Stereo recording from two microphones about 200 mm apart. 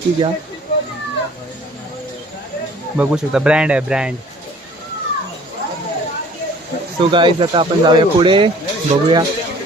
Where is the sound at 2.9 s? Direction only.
5° right (ahead or behind).